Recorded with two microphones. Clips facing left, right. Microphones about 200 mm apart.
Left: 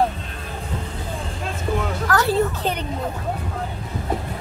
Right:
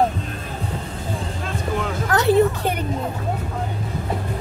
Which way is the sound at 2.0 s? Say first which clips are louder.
Right 4 dB; 20° right (ahead or behind).